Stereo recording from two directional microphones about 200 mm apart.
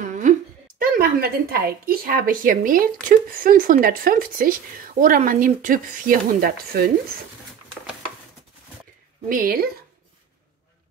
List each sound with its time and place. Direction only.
0.0 s a sound: 40° right (ahead or behind)
0.7 s speech: 45° right (ahead or behind)
9.3 s speech: 45° right (ahead or behind)